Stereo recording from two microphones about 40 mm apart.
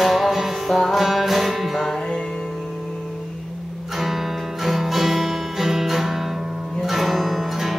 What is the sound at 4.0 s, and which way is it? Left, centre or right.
Music, centre.